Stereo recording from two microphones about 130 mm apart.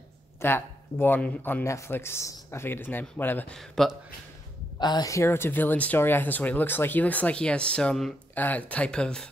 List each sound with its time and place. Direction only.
0.4 s speech: 20° left (ahead or behind)
3.5 s speech: centre (ahead or behind)
4.7 s speech: 30° left (ahead or behind); by 9.3 s 5° left (ahead or behind)